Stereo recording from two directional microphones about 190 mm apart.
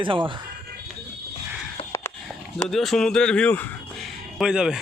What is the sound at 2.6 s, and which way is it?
Speech, centre (ahead or behind).